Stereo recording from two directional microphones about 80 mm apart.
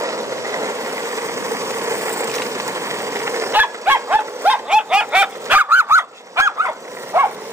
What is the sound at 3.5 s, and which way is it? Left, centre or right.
Dog, right.